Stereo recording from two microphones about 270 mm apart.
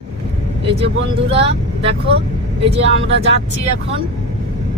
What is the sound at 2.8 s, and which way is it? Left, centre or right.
Speech, right.